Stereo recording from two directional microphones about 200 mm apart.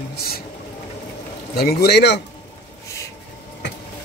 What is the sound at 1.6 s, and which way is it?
Speech, 50° left (ahead or behind).